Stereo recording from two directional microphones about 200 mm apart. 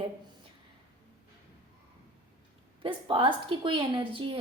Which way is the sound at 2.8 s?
25° right (ahead or behind).